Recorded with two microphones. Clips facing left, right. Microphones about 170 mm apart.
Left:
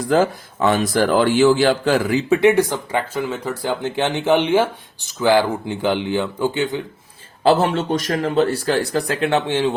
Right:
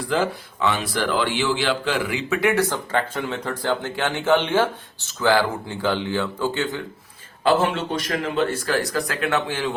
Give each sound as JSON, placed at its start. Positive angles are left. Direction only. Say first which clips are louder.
{"t": 0.0, "sound": "a man's voice", "louder": "left 6 dB", "side_deg": 45}
{"t": 2.4, "sound": "speech", "louder": "left 6 dB", "side_deg": 20}
{"t": 3.2, "sound": "speech", "louder": "left 3 dB", "side_deg": 5}
{"t": 7.4, "sound": "speech", "louder": "left 4 dB", "side_deg": 40}